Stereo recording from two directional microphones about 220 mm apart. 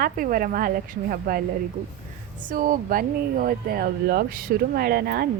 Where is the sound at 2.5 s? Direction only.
40° right (ahead or behind).